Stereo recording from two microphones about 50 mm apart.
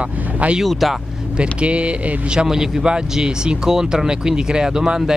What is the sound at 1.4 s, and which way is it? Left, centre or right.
Speech, right.